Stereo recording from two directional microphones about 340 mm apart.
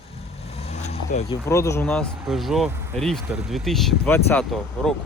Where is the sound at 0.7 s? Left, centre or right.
Centre.